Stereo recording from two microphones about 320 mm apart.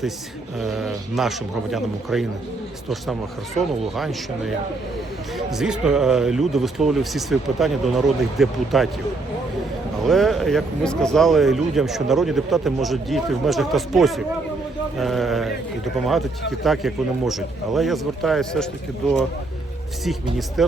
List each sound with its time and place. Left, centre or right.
0.6 s speech: centre
10.0 s speech: centre
20.6 s speech: centre